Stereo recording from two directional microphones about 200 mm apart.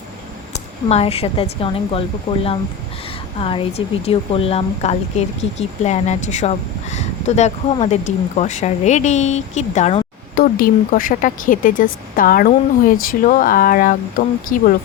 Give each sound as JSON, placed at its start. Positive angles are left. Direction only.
{"t": 0.9, "sound": "a woman's voice", "side_deg": 30}
{"t": 10.4, "sound": "speech", "side_deg": 45}